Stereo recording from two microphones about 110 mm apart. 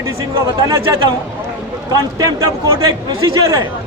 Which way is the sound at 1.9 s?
35° right (ahead or behind).